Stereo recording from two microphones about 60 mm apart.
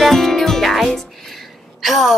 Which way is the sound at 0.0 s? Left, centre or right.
Centre.